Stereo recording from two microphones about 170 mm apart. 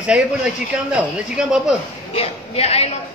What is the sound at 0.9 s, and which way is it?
Speech, 5° right (ahead or behind).